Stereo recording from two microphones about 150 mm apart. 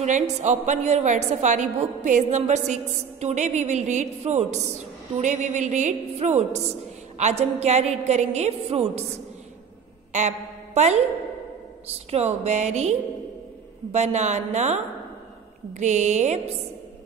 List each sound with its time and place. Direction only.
0.0 s a woman's voice: 50° right (ahead or behind)
10.1 s a woman's voice: 50° right (ahead or behind)
13.9 s a woman's voice: 50° right (ahead or behind)
15.8 s a woman's voice: 50° right (ahead or behind)